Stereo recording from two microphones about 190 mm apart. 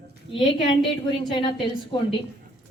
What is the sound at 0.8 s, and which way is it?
Speech, 25° left (ahead or behind).